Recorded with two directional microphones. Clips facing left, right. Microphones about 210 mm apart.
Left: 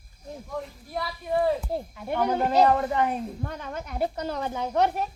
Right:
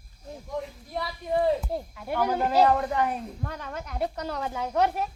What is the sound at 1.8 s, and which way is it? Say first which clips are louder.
Speech: left 1 dB; centre (ahead or behind).